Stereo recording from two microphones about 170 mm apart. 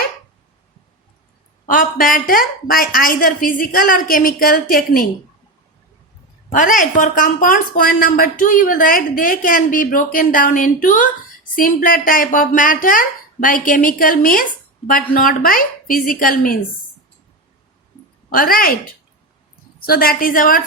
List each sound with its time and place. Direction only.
1.6 s a woman's voice: 55° left (ahead or behind)
6.5 s a woman's voice: 50° left (ahead or behind)
18.3 s a woman's voice: 60° left (ahead or behind)
19.8 s a woman's voice: 60° left (ahead or behind)